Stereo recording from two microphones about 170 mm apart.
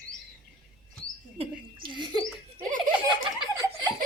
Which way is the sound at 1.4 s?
30° right (ahead or behind).